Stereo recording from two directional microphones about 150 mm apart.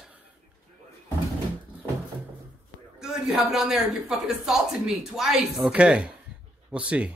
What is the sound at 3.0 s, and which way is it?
Speech, 5° right (ahead or behind).